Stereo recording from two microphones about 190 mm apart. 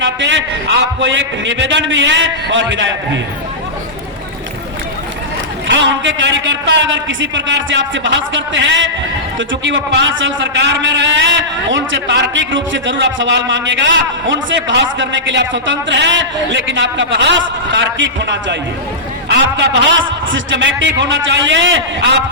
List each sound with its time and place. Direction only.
0.0 s a man's voice: 75° right (ahead or behind)
5.6 s a man's voice: 75° right (ahead or behind)